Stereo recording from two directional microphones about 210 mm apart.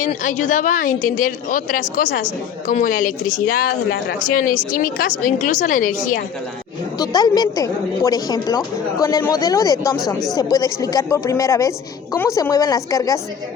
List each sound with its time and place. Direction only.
0.0 s a woman's voice: 35° left (ahead or behind)
7.0 s a woman's voice: 20° left (ahead or behind)